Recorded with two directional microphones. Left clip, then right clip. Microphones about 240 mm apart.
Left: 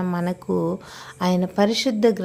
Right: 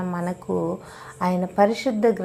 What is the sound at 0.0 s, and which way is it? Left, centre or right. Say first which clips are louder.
Speech: left 2 dB; left.